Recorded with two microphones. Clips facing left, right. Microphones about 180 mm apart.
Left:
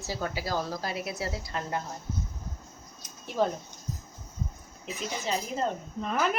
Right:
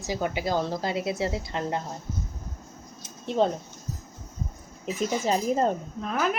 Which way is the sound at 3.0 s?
25° right (ahead or behind).